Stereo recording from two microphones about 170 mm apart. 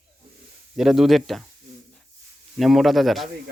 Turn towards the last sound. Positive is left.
turn(degrees=0)  # may be behind; listen again after turning